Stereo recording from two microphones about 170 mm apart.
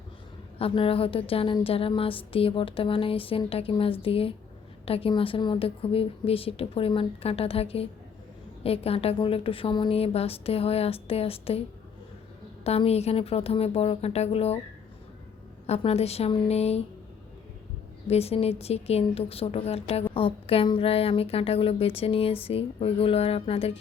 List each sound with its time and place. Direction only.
0.6 s a woman's voice: 35° left (ahead or behind)
12.6 s a woman's voice: 35° left (ahead or behind)
15.6 s a woman's voice: 40° left (ahead or behind)
18.1 s a woman's voice: 35° left (ahead or behind)